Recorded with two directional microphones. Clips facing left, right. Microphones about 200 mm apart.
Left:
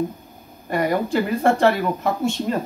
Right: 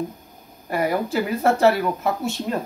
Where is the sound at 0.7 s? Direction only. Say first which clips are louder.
Left 2 dB; 5° right (ahead or behind).